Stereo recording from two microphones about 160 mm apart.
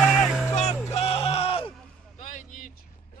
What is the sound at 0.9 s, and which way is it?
Music, 40° left (ahead or behind).